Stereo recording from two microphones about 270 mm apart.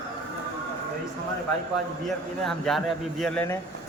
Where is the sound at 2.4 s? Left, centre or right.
Centre.